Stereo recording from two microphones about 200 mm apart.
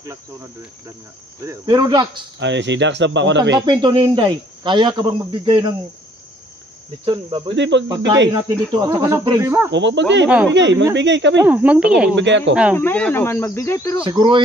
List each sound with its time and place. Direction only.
1.4 s speech: 15° right (ahead or behind)
2.4 s speech: 65° right (ahead or behind)
3.5 s speech: 20° right (ahead or behind)
7.1 s speech: 25° right (ahead or behind)
7.5 s speech: 60° right (ahead or behind)
8.7 s speech: 20° right (ahead or behind)
9.7 s speech: 65° right (ahead or behind)
10.2 s speech: 5° right (ahead or behind)
10.5 s speech: 60° right (ahead or behind)
11.4 s speech: 5° right (ahead or behind)
12.2 s speech: 65° right (ahead or behind)
12.7 s speech: 10° left (ahead or behind)
14.0 s speech: 25° right (ahead or behind)